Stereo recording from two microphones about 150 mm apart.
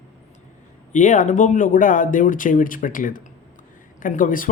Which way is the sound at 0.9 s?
55° left (ahead or behind).